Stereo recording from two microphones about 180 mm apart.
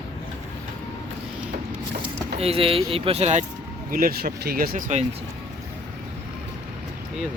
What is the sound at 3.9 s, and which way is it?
Speech, 55° right (ahead or behind).